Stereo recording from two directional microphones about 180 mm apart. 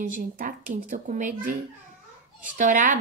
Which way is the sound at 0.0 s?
50° right (ahead or behind).